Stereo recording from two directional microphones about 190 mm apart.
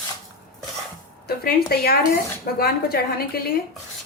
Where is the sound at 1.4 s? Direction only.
55° left (ahead or behind).